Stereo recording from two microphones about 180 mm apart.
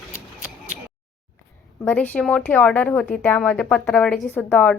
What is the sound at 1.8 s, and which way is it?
A woman's voice, 10° left (ahead or behind).